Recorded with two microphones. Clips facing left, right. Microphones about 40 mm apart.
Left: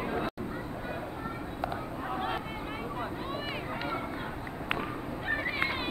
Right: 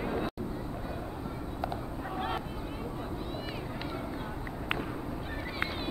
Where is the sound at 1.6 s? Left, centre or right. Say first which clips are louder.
Left 1 dB; centre.